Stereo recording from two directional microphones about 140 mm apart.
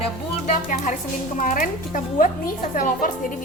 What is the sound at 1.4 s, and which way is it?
Speech, 75° left (ahead or behind).